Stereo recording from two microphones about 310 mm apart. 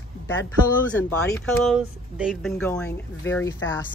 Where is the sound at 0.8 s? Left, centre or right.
Centre.